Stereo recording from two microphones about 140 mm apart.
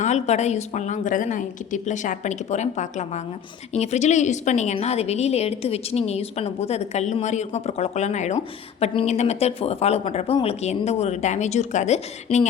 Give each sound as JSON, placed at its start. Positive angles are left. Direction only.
{"t": 0.0, "sound": "a woman's voice", "side_deg": 55}